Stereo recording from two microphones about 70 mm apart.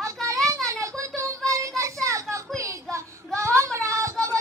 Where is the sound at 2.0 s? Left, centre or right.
Right.